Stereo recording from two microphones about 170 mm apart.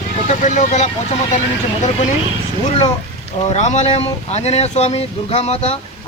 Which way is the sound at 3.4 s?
45° left (ahead or behind).